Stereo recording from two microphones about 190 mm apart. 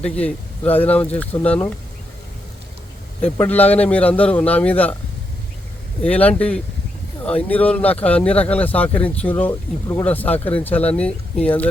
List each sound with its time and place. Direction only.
0.0 s speech: 5° left (ahead or behind)
3.2 s speech: 10° left (ahead or behind)
6.0 s speech: 10° left (ahead or behind)